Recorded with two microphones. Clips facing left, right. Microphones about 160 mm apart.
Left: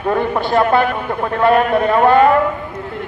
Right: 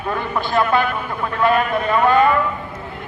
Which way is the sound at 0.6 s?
45° left (ahead or behind).